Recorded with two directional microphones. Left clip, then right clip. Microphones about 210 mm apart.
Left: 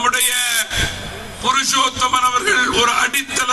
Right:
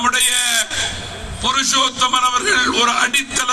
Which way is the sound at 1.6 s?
50° right (ahead or behind).